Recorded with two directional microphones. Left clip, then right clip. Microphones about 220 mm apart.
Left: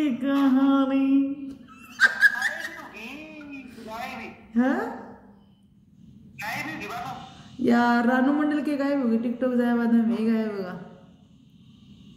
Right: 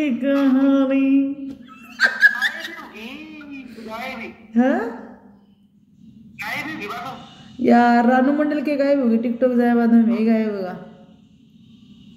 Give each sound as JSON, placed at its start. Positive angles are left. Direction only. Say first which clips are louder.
{"t": 0.0, "sound": "a woman's voice", "louder": "right 5 dB", "side_deg": 15}
{"t": 1.5, "sound": "a sound", "louder": "right 5 dB", "side_deg": 20}
{"t": 4.6, "sound": "a woman's voice", "louder": "right 6 dB", "side_deg": 15}
{"t": 6.3, "sound": "a woman's voice", "louder": "right 4 dB", "side_deg": 20}